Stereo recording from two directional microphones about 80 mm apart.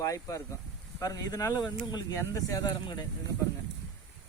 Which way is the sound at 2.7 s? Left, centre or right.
Left.